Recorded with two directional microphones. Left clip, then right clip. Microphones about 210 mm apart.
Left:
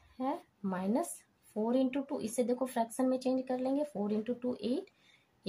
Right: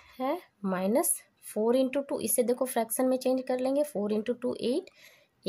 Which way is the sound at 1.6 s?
55° right (ahead or behind).